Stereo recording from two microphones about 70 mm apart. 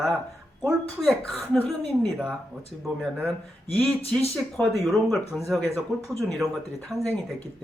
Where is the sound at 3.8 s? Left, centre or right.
Centre.